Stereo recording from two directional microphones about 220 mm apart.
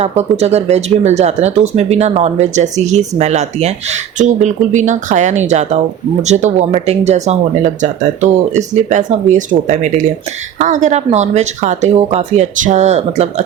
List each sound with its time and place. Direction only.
0.0 s speech: 30° right (ahead or behind)